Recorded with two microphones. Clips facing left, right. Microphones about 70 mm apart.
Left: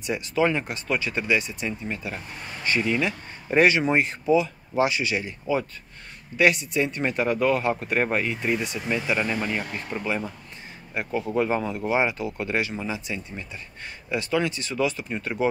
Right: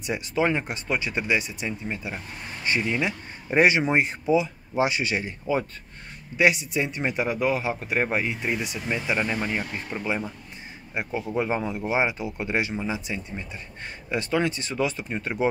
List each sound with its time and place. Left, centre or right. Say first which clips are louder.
0.0 s speech: left 1 dB; right
6.3 s speech: left 1 dB; centre